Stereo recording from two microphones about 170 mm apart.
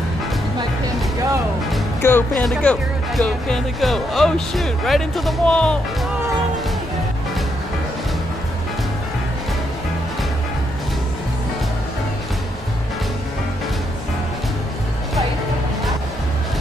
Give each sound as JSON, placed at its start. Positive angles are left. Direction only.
{"t": 2.0, "sound": "speech", "side_deg": 15}